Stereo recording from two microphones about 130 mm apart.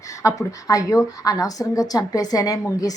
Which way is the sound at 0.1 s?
25° left (ahead or behind).